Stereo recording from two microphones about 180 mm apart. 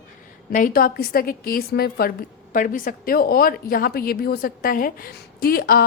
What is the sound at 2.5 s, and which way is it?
A woman's voice, 50° left (ahead or behind).